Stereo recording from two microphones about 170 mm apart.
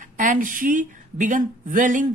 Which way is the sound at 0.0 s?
50° right (ahead or behind).